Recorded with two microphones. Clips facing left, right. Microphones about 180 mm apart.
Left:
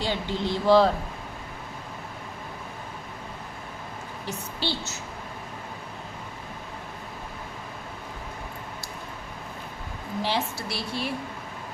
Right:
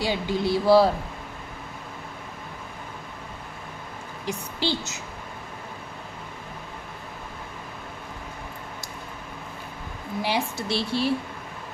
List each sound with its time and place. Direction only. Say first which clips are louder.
0.0 s speech: right 3 dB; 10° right (ahead or behind)
4.3 s speech: right 4 dB; 15° right (ahead or behind)
10.2 s speech: right 1 dB; 10° right (ahead or behind)
10.7 s a woman's voice: right 6 dB; 30° right (ahead or behind)